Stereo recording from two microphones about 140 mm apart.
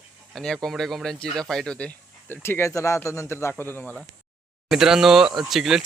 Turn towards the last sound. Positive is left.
turn(degrees=0)  # may be behind; listen again after turning